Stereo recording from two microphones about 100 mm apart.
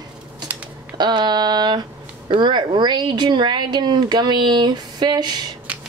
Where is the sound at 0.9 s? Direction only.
50° right (ahead or behind).